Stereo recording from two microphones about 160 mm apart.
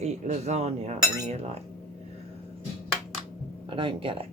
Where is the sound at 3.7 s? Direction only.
30° right (ahead or behind).